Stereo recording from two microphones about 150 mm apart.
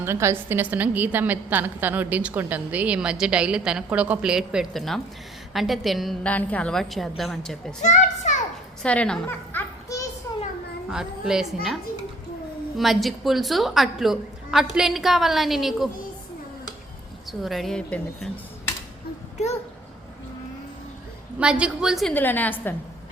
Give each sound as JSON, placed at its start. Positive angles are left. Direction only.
{"t": 0.0, "sound": "a woman's voice", "side_deg": -15}
{"t": 7.8, "sound": "children playing", "side_deg": 50}
{"t": 8.8, "sound": "a woman's voice", "side_deg": 5}
{"t": 9.2, "sound": "children playing", "side_deg": 15}
{"t": 10.9, "sound": "a woman's voice", "side_deg": -5}
{"t": 17.4, "sound": "a woman's voice", "side_deg": 0}
{"t": 21.3, "sound": "a woman's voice", "side_deg": -5}
{"t": 22.1, "sound": "a woman's voice", "side_deg": 10}